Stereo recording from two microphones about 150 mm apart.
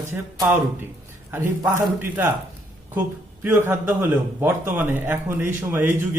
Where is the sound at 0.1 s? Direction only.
15° right (ahead or behind).